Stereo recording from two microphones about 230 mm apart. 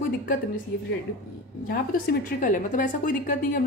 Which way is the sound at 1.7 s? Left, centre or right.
Left.